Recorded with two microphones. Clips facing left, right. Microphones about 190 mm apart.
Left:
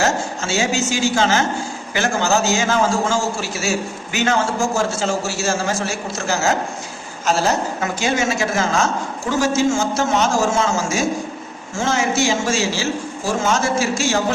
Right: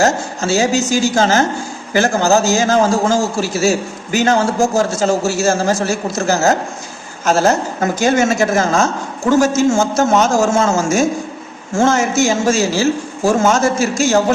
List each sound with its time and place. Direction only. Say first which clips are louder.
0.0 s a man's voice: right 5 dB; 40° right (ahead or behind)